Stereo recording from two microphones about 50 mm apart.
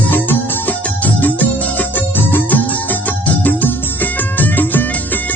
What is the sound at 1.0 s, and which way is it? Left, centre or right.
Music, left.